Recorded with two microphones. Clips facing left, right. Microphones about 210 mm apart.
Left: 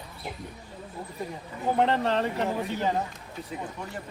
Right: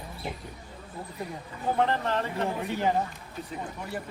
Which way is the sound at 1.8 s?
20° left (ahead or behind).